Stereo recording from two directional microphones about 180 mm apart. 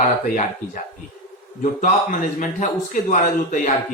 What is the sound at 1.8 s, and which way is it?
A man's voice, 45° left (ahead or behind).